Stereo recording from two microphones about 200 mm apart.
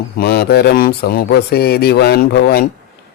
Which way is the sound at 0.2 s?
50° left (ahead or behind).